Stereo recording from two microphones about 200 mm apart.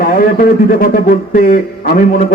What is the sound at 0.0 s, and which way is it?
Speech, 45° left (ahead or behind).